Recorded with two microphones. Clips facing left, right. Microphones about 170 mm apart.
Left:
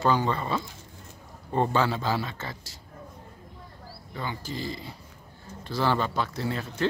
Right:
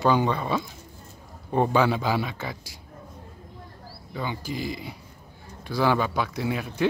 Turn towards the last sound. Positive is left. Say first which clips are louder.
# right 3 dB
turn(degrees=-15)  # may be behind; listen again after turning